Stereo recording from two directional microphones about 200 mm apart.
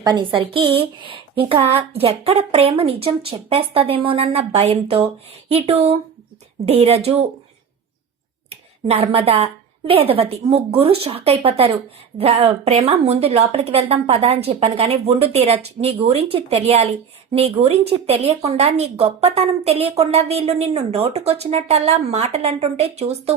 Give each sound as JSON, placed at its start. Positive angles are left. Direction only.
{"t": 0.0, "sound": "a woman's voice", "side_deg": -20}
{"t": 8.4, "sound": "a woman's voice", "side_deg": -30}